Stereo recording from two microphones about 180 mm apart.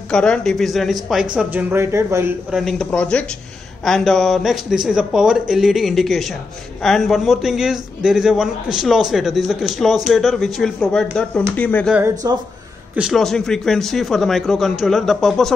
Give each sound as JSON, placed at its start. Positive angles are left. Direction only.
{"t": 0.1, "sound": "a man's voice", "side_deg": 5}
{"t": 2.5, "sound": "a man's voice", "side_deg": 0}
{"t": 12.2, "sound": "speech", "side_deg": -20}
{"t": 12.9, "sound": "a man's voice", "side_deg": 0}